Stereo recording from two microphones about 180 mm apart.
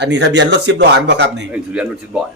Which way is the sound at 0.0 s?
75° right (ahead or behind).